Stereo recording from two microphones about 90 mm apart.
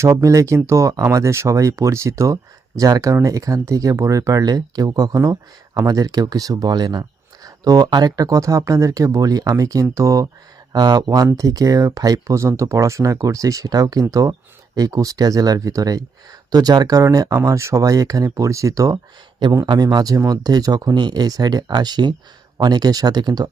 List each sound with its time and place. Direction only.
0.0 s speech: 35° right (ahead or behind)
19.6 s speech: 55° right (ahead or behind)